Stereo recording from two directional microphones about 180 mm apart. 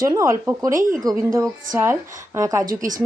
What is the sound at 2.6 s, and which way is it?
Speech, 45° right (ahead or behind).